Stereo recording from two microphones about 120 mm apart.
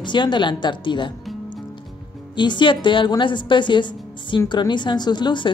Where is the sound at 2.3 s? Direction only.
40° left (ahead or behind).